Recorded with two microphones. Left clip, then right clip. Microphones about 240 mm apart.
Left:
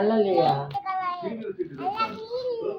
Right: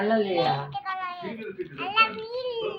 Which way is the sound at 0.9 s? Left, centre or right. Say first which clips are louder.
Left 4 dB; centre.